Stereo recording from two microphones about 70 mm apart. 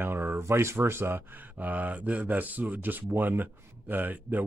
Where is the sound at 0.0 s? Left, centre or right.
Right.